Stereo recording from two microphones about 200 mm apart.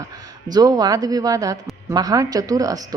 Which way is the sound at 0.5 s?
20° right (ahead or behind).